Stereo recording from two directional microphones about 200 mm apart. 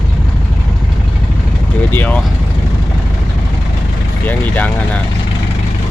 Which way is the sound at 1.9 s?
10° left (ahead or behind).